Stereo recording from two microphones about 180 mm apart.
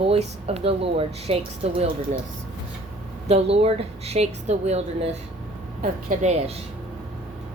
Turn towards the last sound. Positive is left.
turn(degrees=-40)  # may be behind; listen again after turning